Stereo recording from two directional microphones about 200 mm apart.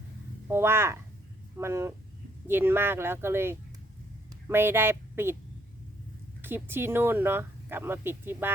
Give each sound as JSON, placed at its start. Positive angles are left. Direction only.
{"t": 0.4, "sound": "speech", "side_deg": -10}
{"t": 6.4, "sound": "speech", "side_deg": -10}